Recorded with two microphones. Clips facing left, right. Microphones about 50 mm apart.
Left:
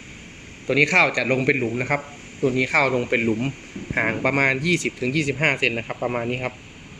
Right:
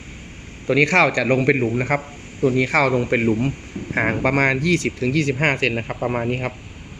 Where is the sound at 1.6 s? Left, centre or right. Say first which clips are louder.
Right 3 dB; right.